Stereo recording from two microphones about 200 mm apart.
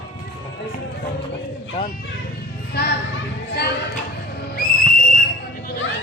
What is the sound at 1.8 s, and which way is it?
Vehicle, 30° left (ahead or behind).